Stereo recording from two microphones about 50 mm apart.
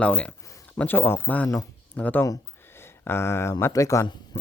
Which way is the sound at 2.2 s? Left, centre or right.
Left.